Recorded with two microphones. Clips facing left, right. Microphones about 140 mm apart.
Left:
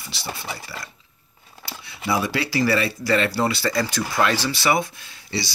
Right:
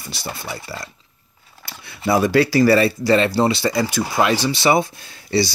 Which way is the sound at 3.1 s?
25° right (ahead or behind).